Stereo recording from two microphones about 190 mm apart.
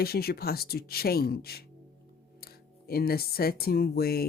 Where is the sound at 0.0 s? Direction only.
55° left (ahead or behind).